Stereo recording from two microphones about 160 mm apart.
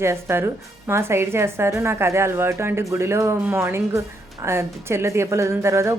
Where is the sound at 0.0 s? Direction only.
15° right (ahead or behind).